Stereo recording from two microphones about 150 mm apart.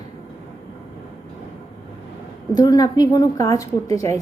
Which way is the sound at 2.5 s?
25° left (ahead or behind).